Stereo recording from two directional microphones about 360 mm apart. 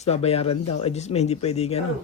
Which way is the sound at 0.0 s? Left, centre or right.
Centre.